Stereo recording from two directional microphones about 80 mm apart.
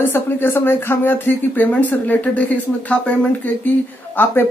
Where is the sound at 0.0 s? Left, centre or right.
Left.